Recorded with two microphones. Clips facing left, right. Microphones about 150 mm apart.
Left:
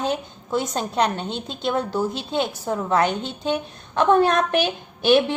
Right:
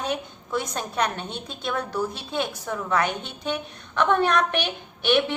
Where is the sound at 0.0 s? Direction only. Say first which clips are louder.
Left 4 dB; 25° left (ahead or behind).